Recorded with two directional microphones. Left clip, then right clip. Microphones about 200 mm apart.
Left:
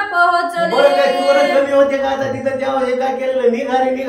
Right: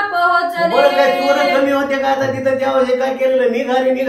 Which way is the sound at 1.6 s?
20° right (ahead or behind).